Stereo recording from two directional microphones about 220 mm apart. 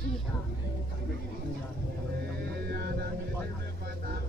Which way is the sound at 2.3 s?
45° right (ahead or behind).